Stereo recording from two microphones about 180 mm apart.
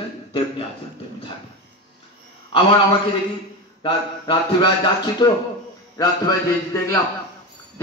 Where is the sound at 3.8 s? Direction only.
25° left (ahead or behind).